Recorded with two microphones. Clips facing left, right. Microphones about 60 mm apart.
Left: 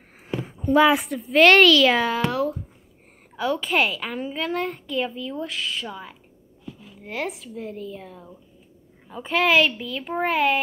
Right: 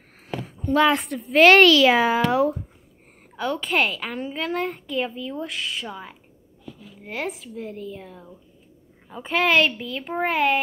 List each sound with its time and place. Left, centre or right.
0.3 s a sound: left
0.7 s a child's voice: centre; by 2.6 s right
3.3 s a child's voice: centre